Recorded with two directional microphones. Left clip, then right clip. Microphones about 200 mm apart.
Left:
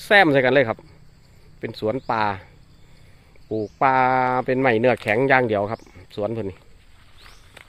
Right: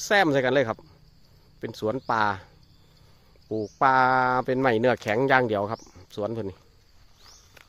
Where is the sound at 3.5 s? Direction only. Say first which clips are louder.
Left 2 dB; 20° right (ahead or behind).